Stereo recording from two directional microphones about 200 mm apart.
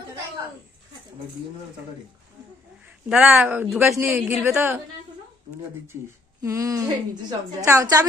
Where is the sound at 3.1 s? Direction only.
10° right (ahead or behind).